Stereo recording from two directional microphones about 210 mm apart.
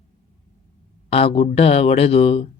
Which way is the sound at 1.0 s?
25° left (ahead or behind).